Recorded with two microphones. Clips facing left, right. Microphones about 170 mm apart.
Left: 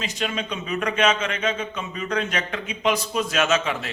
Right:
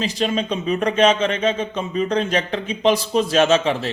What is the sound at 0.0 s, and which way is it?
A man's voice, 35° right (ahead or behind).